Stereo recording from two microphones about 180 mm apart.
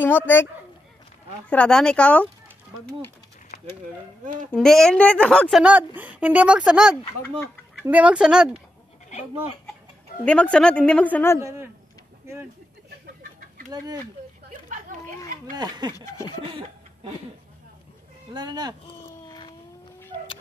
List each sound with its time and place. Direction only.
0.0 s a woman's voice: 10° left (ahead or behind)
1.5 s a woman's voice: 5° left (ahead or behind)
4.5 s a woman's voice: centre (ahead or behind)
5.6 s a woman's voice: 5° right (ahead or behind)
10.2 s a woman's voice: 5° left (ahead or behind)
11.3 s a woman's voice: 15° right (ahead or behind)
14.7 s chatter: 45° right (ahead or behind)
15.5 s speech: 20° right (ahead or behind)
16.4 s chuckle: 30° right (ahead or behind)
18.3 s speech: 25° right (ahead or behind)
18.9 s a sound: 25° left (ahead or behind)